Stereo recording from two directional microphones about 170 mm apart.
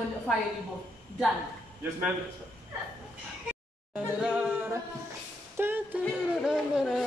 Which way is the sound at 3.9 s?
5° right (ahead or behind).